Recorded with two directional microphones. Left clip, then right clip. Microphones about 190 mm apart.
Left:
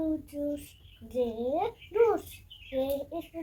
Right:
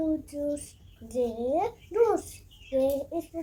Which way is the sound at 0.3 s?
5° right (ahead or behind).